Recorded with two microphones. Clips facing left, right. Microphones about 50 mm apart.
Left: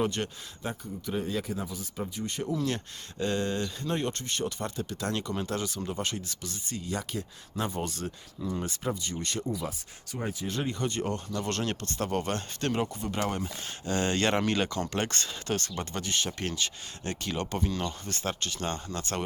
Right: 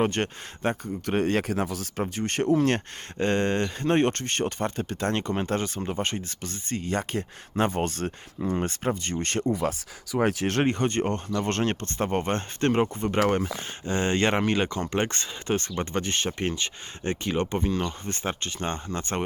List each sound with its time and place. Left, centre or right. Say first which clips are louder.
0.0 s speech: right 5 dB; right
10.2 s speech: right 9 dB; right
13.2 s speech: right 8 dB; right
13.8 s speech: right 3 dB; right